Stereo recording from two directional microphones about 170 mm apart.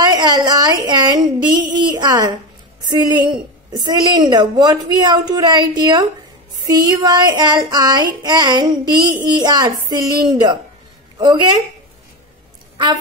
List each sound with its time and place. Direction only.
0.0 s a sound: 25° right (ahead or behind)
2.9 s a woman's voice: 25° right (ahead or behind)
12.7 s speech: 25° right (ahead or behind)